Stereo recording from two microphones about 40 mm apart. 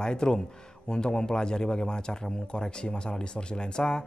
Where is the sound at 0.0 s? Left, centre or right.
Centre.